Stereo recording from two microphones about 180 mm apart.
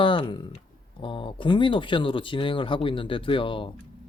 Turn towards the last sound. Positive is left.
turn(degrees=30)  # may be behind; listen again after turning